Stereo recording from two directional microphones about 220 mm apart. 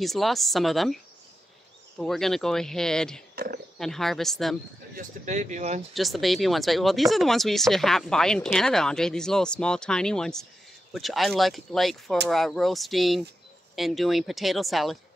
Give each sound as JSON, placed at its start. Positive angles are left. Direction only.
{"t": 0.0, "sound": "speech", "side_deg": 0}
{"t": 2.0, "sound": "speech", "side_deg": 0}
{"t": 3.3, "sound": "a sound", "side_deg": -45}
{"t": 3.7, "sound": "speech", "side_deg": 0}
{"t": 4.9, "sound": "speech", "side_deg": -35}
{"t": 5.9, "sound": "speech", "side_deg": 0}